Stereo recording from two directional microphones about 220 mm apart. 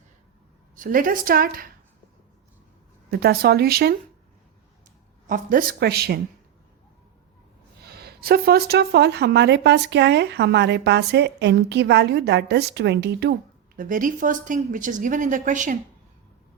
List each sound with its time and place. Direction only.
0.8 s speech: 40° right (ahead or behind)
3.1 s speech: 45° right (ahead or behind)
5.3 s speech: 40° right (ahead or behind)
7.8 s speech: 45° right (ahead or behind)